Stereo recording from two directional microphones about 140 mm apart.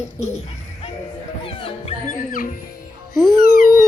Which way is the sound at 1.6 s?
45° left (ahead or behind).